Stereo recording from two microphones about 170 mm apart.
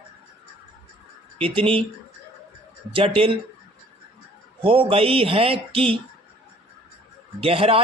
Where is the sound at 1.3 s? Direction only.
30° right (ahead or behind).